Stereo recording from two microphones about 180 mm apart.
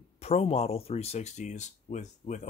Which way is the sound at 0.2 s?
35° left (ahead or behind).